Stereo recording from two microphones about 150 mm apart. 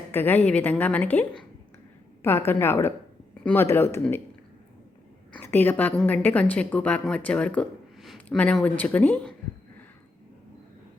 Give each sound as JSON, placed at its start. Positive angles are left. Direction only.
{"t": 0.1, "sound": "a woman's voice", "side_deg": 15}
{"t": 2.2, "sound": "a woman's voice", "side_deg": 15}
{"t": 5.3, "sound": "a woman's voice", "side_deg": 15}